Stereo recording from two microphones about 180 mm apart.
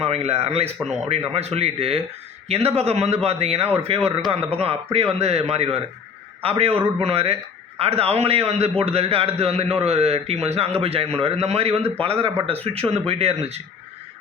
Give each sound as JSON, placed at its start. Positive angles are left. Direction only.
{"t": 0.0, "sound": "a man's voice", "side_deg": -35}